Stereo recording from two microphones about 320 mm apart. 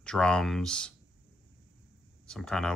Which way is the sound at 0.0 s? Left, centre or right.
Centre.